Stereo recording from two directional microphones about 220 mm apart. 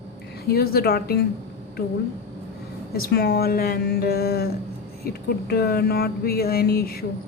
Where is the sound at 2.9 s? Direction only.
45° left (ahead or behind).